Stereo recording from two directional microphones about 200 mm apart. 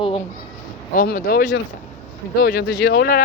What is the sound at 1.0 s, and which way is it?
Speech, 45° left (ahead or behind).